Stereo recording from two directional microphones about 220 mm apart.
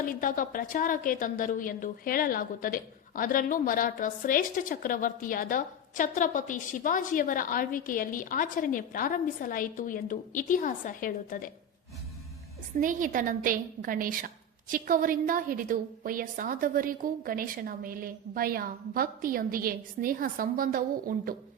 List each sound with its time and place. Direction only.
0.0 s a woman's voice: 40° left (ahead or behind)
12.8 s a woman's voice: 35° right (ahead or behind)